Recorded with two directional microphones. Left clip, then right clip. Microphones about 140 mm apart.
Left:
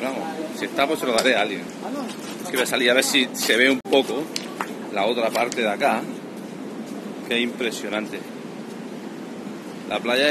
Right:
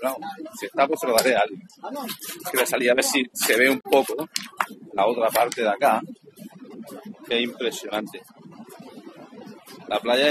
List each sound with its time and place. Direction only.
0.6 s speech: 20° left (ahead or behind)
2.6 s speech: 20° left (ahead or behind)
7.2 s speech: 20° left (ahead or behind)
9.8 s speech: 20° left (ahead or behind)